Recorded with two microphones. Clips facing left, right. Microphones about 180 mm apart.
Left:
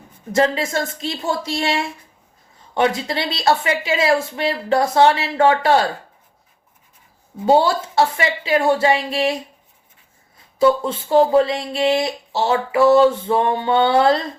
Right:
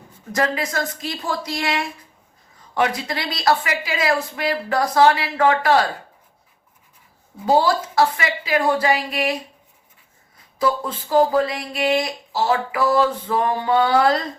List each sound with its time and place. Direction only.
0.3 s speech: 25° left (ahead or behind)
7.4 s speech: 25° left (ahead or behind)
10.6 s speech: 25° left (ahead or behind)